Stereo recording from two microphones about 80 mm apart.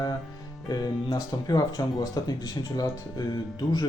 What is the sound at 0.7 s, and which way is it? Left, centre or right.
Speech, left.